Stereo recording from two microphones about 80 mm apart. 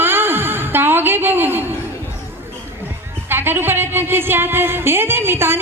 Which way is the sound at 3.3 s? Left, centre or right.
Right.